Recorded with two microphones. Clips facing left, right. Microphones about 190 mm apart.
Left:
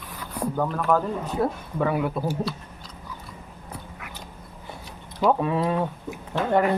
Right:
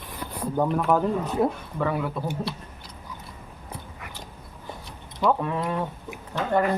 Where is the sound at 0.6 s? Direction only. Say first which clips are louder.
Right 2 dB; 15° right (ahead or behind).